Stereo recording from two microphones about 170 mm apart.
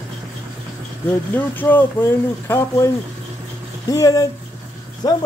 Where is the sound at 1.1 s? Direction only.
10° left (ahead or behind).